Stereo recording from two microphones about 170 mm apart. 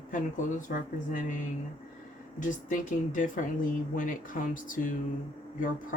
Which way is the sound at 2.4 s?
50° left (ahead or behind).